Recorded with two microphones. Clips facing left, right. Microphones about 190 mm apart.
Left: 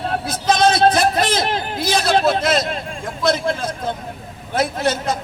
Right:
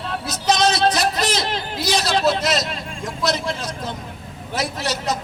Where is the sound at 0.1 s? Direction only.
55° left (ahead or behind).